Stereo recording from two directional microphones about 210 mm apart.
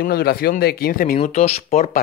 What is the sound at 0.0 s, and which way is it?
Speech, 45° left (ahead or behind).